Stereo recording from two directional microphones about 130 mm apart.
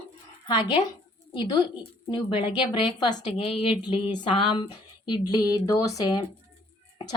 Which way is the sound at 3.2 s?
50° left (ahead or behind).